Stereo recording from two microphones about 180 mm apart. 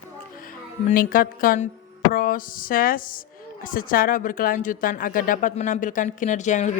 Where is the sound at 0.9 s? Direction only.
50° left (ahead or behind).